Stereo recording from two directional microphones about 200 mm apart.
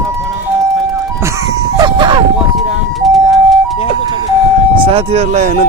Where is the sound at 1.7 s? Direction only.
20° right (ahead or behind).